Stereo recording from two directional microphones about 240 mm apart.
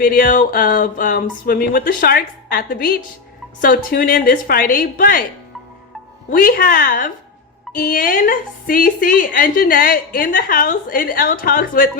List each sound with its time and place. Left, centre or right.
0.0 s a woman's voice: left
6.3 s a woman's voice: left